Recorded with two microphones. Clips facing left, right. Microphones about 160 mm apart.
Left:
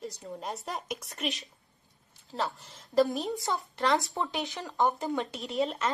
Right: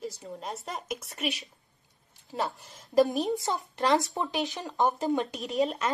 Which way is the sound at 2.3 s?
15° right (ahead or behind).